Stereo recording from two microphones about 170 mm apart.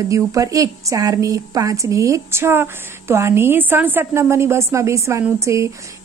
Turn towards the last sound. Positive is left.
turn(degrees=-15)  # may be behind; listen again after turning